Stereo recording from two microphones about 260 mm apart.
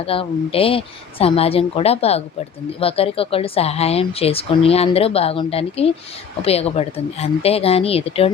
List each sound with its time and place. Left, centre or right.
0.0 s speech: left